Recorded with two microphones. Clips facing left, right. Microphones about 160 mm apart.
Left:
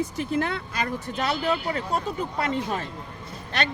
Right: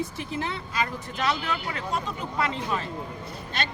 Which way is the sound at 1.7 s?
35° left (ahead or behind).